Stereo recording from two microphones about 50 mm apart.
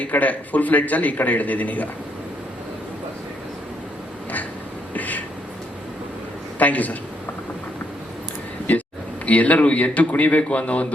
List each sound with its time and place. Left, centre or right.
0.0 s a man's voice: left
4.9 s a sound: left
6.6 s a man's voice: left
9.2 s a man's voice: left